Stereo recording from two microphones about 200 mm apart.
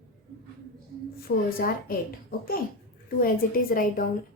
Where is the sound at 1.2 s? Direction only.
45° left (ahead or behind).